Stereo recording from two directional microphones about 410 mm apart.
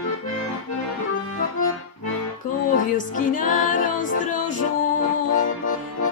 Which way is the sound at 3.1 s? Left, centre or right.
Centre.